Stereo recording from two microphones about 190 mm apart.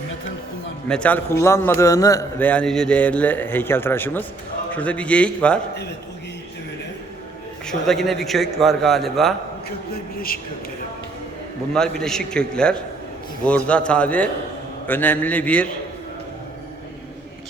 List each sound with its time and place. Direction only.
0.9 s a man's voice: 5° left (ahead or behind)
2.5 s a man's voice: 5° left (ahead or behind)
7.7 s a man's voice: centre (ahead or behind)
9.6 s a man's voice: 50° left (ahead or behind)
11.7 s a man's voice: 5° left (ahead or behind)